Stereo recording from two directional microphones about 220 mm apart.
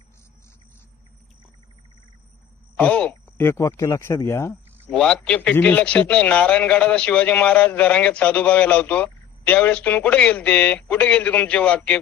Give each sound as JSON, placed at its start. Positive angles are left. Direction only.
{"t": 2.7, "sound": "speech", "side_deg": 5}